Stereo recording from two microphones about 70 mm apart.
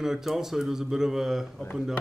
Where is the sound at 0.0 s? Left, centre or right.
Centre.